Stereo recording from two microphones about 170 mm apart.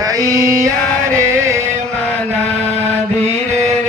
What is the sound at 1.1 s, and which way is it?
Music, 15° right (ahead or behind).